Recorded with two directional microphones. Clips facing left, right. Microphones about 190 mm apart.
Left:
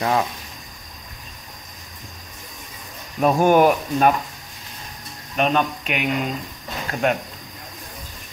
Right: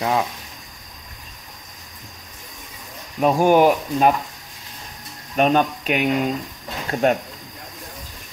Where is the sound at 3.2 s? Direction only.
15° right (ahead or behind).